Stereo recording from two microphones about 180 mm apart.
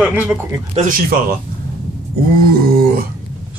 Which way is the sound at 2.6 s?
55° right (ahead or behind).